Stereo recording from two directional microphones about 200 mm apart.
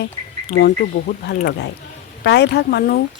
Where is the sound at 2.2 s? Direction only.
55° left (ahead or behind).